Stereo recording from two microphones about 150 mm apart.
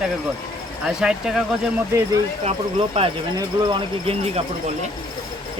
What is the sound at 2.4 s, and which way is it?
Speech, 40° right (ahead or behind).